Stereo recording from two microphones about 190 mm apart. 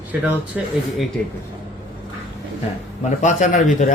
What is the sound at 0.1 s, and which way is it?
Speech, 10° right (ahead or behind).